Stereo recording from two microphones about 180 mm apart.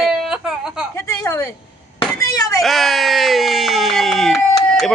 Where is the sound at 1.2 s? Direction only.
15° left (ahead or behind).